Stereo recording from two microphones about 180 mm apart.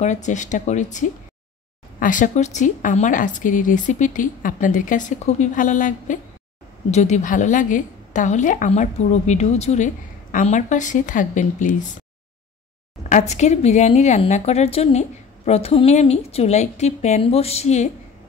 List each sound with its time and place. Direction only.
0.0 s a woman's voice: 40° left (ahead or behind)
13.3 s a woman's voice: 40° left (ahead or behind)